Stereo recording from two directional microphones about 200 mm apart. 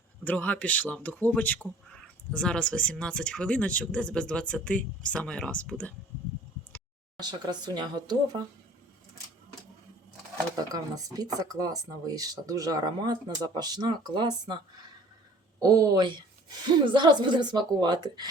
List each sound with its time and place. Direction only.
0.3 s a man's voice: 5° left (ahead or behind)
7.2 s speech: 20° right (ahead or behind)
10.5 s speech: 20° right (ahead or behind)
15.6 s speech: 15° right (ahead or behind)